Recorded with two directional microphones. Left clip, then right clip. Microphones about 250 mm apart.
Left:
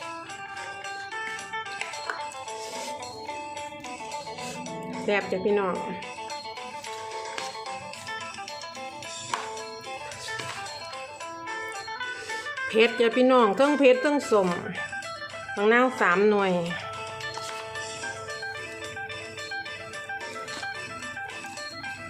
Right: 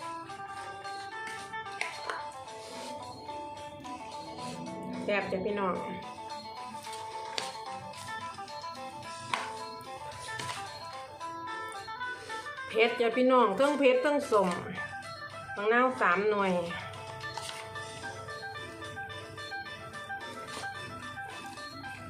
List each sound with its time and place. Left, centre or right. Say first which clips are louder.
5.0 s speech: left 6 dB; left
12.6 s speech: left 5 dB; left
15.5 s speech: left 5 dB; left